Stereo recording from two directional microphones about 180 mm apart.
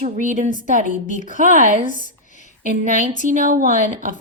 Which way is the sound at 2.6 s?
45° right (ahead or behind).